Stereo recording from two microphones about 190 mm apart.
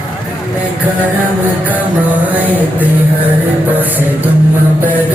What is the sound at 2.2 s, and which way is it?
Speech, 10° right (ahead or behind).